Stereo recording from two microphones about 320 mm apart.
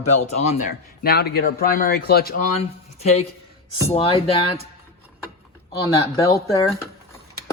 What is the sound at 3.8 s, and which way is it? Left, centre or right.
Speech, centre.